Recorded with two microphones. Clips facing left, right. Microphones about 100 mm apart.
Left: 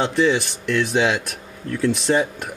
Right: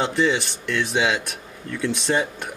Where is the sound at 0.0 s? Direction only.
Centre (ahead or behind).